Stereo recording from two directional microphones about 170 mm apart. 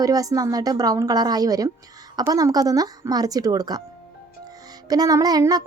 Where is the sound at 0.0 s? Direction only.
20° right (ahead or behind).